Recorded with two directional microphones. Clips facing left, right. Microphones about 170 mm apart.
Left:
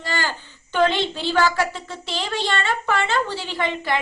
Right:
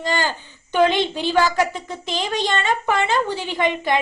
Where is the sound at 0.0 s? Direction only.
20° right (ahead or behind).